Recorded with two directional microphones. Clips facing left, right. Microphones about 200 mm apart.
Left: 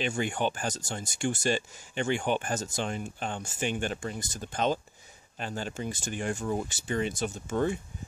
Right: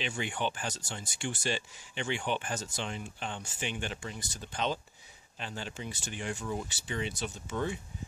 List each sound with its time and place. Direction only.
0.0 s speech: 45° left (ahead or behind)